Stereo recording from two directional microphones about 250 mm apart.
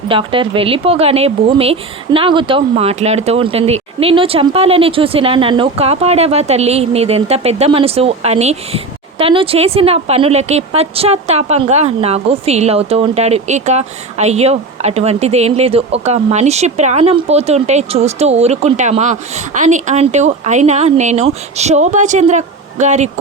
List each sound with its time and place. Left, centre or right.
0.1 s speech: right